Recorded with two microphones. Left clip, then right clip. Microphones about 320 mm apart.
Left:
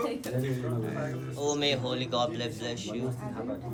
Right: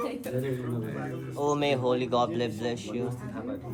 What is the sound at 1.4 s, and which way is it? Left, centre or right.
A man's voice, right.